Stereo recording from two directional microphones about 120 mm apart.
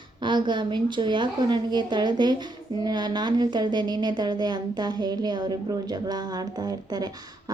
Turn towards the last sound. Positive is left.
turn(degrees=-35)  # may be behind; listen again after turning